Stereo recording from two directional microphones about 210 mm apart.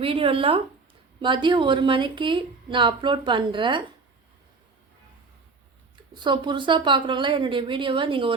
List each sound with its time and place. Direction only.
0.0 s speech: 25° right (ahead or behind)
6.1 s speech: 20° right (ahead or behind)